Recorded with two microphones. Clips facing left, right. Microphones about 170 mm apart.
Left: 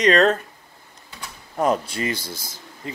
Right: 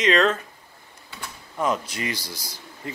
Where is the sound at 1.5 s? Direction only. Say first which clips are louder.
Left 4 dB; 40° left (ahead or behind).